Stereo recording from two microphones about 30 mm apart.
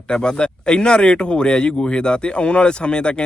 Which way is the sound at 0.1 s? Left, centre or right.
Left.